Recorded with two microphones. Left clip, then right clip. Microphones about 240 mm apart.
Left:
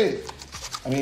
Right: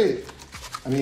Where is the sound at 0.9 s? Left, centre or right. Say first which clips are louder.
Right 1 dB; left.